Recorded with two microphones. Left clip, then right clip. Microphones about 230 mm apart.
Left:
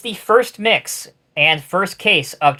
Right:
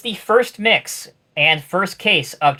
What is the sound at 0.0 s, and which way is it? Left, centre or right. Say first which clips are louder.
Speech: left 1 dB; left.